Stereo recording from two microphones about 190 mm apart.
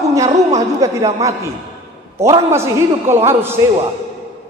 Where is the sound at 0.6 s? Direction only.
15° right (ahead or behind).